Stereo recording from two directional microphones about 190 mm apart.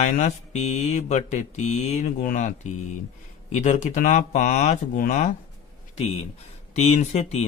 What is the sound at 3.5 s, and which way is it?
Mantra, 40° left (ahead or behind).